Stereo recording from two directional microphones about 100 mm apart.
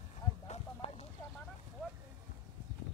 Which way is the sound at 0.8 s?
90° left.